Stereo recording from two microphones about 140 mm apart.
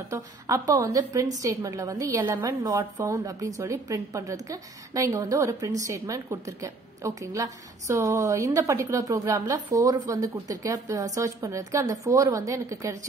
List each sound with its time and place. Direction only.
0.1 s a woman's voice: 25° right (ahead or behind)